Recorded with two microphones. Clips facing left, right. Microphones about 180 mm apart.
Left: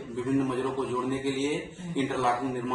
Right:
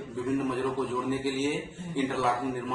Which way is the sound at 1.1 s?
20° left (ahead or behind).